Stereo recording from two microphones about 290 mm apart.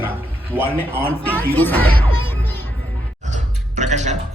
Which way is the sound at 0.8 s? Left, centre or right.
Centre.